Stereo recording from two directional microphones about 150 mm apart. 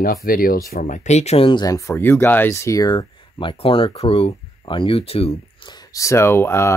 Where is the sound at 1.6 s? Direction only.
20° left (ahead or behind); by 5.7 s 40° left (ahead or behind).